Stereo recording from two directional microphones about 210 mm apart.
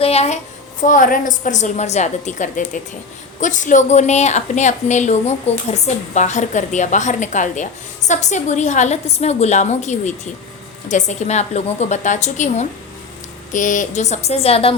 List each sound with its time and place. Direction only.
0.0 s a child's voice: 30° left (ahead or behind)